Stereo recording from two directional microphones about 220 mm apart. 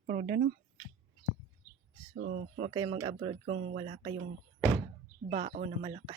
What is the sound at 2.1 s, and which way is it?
Speech, 45° right (ahead or behind).